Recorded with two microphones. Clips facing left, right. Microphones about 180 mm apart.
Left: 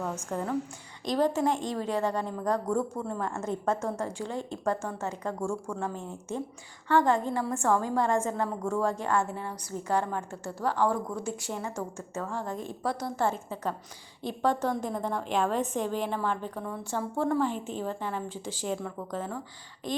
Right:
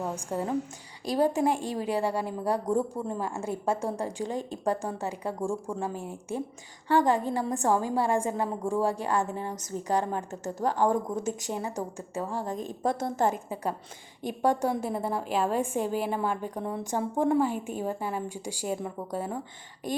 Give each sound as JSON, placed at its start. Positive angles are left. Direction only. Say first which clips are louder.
{"t": 0.0, "sound": "a woman's voice", "louder": "right 1 dB", "side_deg": -15}
{"t": 10.6, "sound": "a woman's voice", "louder": "right 2 dB", "side_deg": -40}
{"t": 11.2, "sound": "a woman's voice", "louder": "right 2 dB", "side_deg": -20}
{"t": 13.0, "sound": "a woman's voice", "louder": "right 3 dB", "side_deg": -50}
{"t": 13.2, "sound": "a woman's voice", "louder": "right 1 dB", "side_deg": -15}